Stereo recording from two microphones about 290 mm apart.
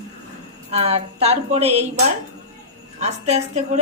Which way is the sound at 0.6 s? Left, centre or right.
Right.